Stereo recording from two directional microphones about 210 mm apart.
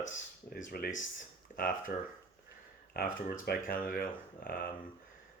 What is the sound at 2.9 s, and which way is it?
Speech, 45° left (ahead or behind).